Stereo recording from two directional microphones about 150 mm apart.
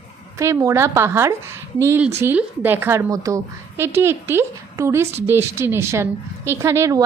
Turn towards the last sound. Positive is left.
turn(degrees=-20)  # may be behind; listen again after turning